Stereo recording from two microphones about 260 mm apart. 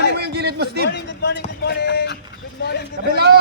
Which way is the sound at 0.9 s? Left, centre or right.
Left.